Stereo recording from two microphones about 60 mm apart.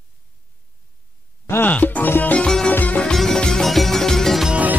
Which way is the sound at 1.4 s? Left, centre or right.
Left.